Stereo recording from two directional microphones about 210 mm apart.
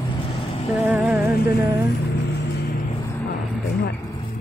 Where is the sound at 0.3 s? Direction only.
25° left (ahead or behind).